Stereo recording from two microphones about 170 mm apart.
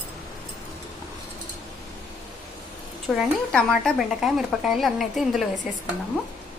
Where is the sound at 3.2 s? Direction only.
5° left (ahead or behind).